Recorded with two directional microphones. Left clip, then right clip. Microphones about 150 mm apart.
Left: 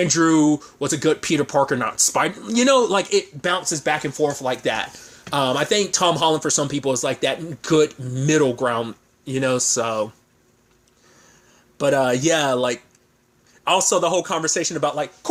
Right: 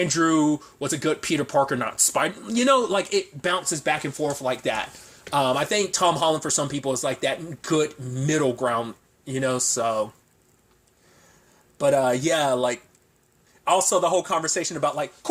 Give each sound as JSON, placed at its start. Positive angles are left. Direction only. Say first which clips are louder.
{"t": 0.0, "sound": "speech", "louder": "left 4 dB", "side_deg": 35}
{"t": 11.8, "sound": "speech", "louder": "left 2 dB", "side_deg": 50}
{"t": 13.9, "sound": "speech", "louder": "left 2 dB", "side_deg": 50}